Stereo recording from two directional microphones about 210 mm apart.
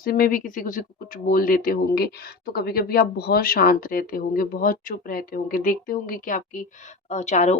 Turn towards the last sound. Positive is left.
turn(degrees=35)  # may be behind; listen again after turning